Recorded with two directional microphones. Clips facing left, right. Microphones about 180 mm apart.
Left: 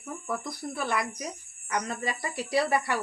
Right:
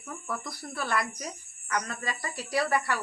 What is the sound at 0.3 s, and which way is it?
Speech, 20° left (ahead or behind).